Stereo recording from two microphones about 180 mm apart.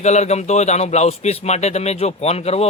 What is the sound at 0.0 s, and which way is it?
Speech, 40° left (ahead or behind).